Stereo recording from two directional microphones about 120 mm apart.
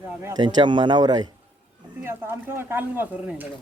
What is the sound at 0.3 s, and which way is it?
Speech, 40° right (ahead or behind).